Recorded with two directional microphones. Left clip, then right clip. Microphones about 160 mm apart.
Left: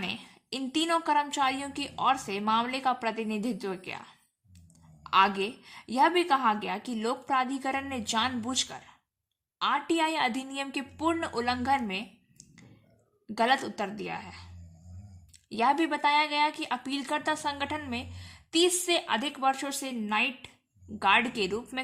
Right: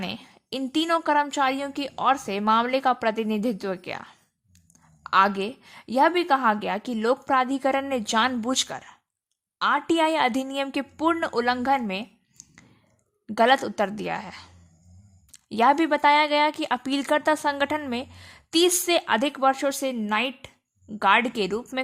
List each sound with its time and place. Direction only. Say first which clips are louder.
0.0 s a woman's voice: right 2 dB; 45° right (ahead or behind)